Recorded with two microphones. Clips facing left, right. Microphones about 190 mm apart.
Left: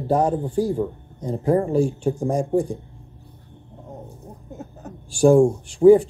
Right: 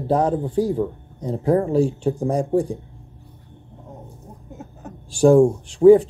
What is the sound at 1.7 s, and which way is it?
Speech, 35° right (ahead or behind).